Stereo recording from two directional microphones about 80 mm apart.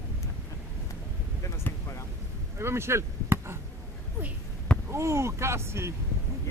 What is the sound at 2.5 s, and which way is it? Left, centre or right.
Chop, right.